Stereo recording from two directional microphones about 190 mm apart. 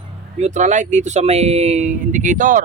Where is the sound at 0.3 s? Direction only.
40° right (ahead or behind).